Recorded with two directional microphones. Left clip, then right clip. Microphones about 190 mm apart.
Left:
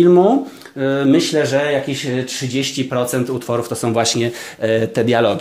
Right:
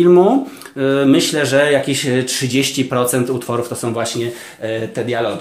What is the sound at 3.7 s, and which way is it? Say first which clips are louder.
Speech: left 3 dB; 35° left (ahead or behind).